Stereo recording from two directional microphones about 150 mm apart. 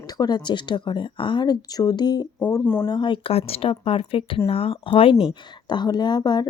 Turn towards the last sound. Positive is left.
turn(degrees=30)  # may be behind; listen again after turning